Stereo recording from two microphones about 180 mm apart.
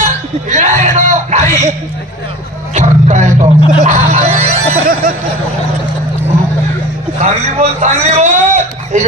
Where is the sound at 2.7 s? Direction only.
40° right (ahead or behind).